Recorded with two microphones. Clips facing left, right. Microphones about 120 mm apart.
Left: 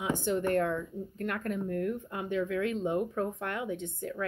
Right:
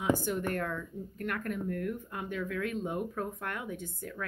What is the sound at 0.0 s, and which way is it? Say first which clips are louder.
Speech: even; 25° left (ahead or behind).